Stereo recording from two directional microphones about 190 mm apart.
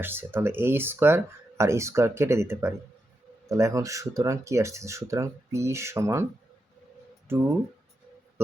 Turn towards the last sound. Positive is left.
turn(degrees=-10)  # may be behind; listen again after turning